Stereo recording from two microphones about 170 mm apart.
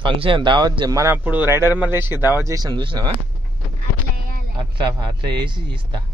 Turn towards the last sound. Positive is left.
turn(degrees=-25)  # may be behind; listen again after turning